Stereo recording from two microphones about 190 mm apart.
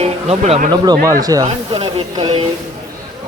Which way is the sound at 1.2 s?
20° right (ahead or behind).